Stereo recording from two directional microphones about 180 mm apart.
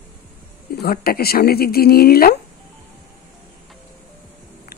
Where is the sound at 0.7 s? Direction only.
60° left (ahead or behind).